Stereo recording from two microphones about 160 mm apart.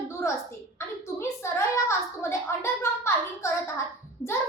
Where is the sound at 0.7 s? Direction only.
15° left (ahead or behind).